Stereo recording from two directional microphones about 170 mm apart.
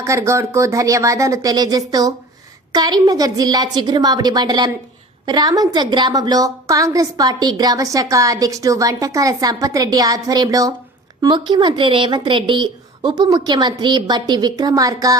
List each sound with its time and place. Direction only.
0.0 s a woman's voice: 20° right (ahead or behind)